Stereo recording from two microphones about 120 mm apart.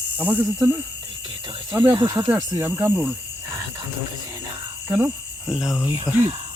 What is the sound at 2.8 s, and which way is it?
Speech, 20° right (ahead or behind).